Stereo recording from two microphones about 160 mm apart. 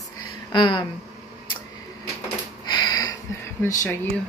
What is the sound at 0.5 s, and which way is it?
Speech, 30° left (ahead or behind).